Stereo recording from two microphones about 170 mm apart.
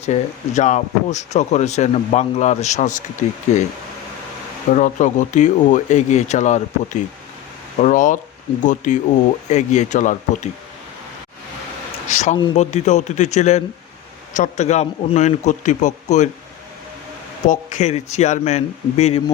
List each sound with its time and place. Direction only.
0.0 s speech: 40° left (ahead or behind)
4.7 s speech: 45° left (ahead or behind)
12.0 s a sound: 45° left (ahead or behind)
12.5 s speech: 45° left (ahead or behind)
17.5 s speech: 45° left (ahead or behind)